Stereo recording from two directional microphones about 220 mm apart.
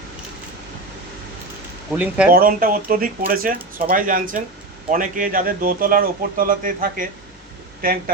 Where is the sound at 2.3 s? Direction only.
40° right (ahead or behind).